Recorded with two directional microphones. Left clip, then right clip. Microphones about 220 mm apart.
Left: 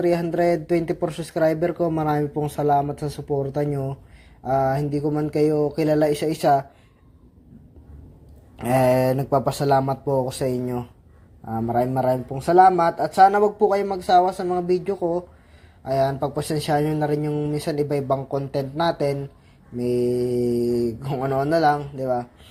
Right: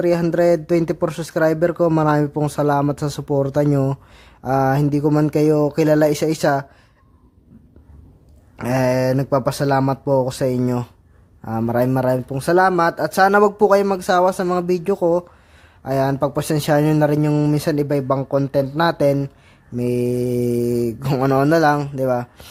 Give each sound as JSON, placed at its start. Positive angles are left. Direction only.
{"t": 0.0, "sound": "speech", "side_deg": -25}
{"t": 8.6, "sound": "speech", "side_deg": -20}